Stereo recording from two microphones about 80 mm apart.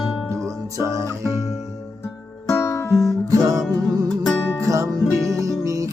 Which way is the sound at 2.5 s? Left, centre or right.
Left.